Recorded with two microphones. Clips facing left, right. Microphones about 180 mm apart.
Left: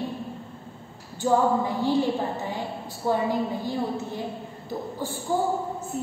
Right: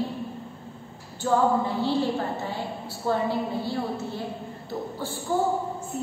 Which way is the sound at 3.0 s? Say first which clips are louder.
Left 1 dB; 15° left (ahead or behind).